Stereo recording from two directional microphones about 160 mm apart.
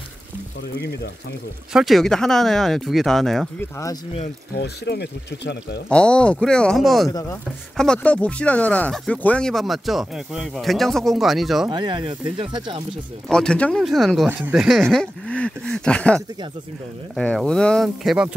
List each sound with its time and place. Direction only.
1.7 s speech: centre (ahead or behind)
4.6 s speech: 90° left
5.9 s speech: 5° left (ahead or behind)
7.1 s chopping: 20° left (ahead or behind)
7.7 s speech: 5° left (ahead or behind)
11.7 s speech: 30° right (ahead or behind)
13.3 s speech: 5° left (ahead or behind)